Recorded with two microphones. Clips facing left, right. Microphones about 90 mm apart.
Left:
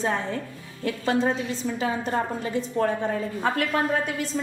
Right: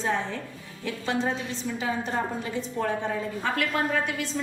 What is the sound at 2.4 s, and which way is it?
A woman's voice, 45° left (ahead or behind).